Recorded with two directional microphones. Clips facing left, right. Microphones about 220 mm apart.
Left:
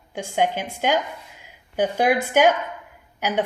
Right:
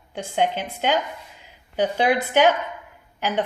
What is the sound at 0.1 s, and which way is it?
A woman's voice, 10° left (ahead or behind).